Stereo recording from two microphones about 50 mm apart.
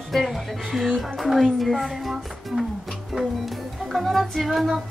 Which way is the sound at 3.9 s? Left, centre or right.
Centre.